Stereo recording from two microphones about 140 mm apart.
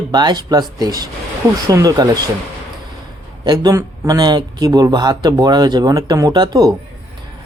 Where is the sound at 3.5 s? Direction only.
25° right (ahead or behind).